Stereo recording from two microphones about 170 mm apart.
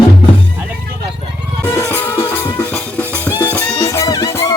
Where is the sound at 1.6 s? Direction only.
15° left (ahead or behind).